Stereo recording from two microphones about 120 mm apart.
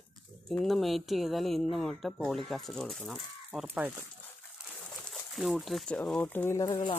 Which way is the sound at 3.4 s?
10° right (ahead or behind).